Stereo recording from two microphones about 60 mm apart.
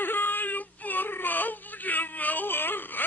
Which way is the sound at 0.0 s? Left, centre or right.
Left.